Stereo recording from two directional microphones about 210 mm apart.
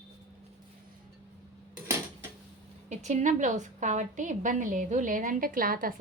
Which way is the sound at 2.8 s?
35° right (ahead or behind).